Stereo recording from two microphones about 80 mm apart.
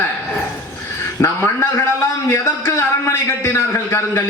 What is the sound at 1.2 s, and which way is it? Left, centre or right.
A man's voice, left.